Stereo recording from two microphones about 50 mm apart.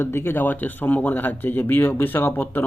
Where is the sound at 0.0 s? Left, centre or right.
Left.